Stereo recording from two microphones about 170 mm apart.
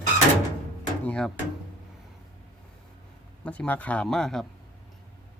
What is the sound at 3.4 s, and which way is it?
Speech, 10° left (ahead or behind).